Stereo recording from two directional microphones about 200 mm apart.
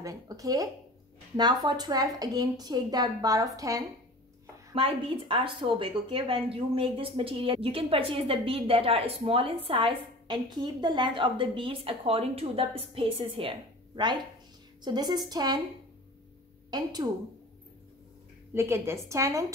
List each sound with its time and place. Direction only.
0.0 s a woman's voice: 15° right (ahead or behind)
18.5 s a woman's voice: 15° right (ahead or behind)